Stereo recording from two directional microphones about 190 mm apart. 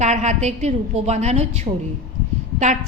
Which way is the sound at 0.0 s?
35° right (ahead or behind).